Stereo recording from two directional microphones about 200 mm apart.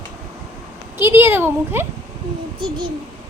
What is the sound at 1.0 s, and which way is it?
Speech, 10° right (ahead or behind).